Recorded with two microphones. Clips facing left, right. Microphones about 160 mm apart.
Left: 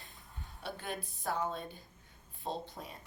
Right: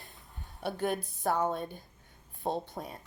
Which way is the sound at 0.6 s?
55° right (ahead or behind).